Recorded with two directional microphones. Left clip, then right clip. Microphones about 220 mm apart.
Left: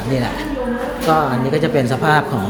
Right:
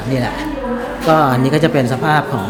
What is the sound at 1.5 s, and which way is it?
Speech, 30° right (ahead or behind).